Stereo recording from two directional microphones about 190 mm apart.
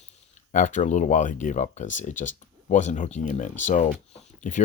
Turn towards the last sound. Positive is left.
turn(degrees=40)  # may be behind; listen again after turning